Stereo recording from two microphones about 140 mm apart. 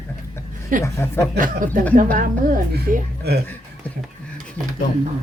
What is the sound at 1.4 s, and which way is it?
A woman's voice, 75° right (ahead or behind).